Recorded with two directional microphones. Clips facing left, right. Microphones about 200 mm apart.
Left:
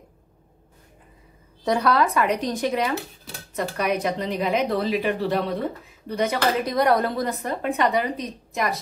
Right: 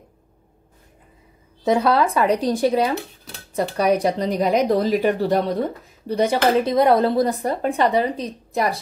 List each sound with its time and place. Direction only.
1.6 s speech: 25° right (ahead or behind)